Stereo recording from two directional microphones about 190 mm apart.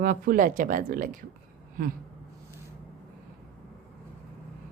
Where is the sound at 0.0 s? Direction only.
45° right (ahead or behind).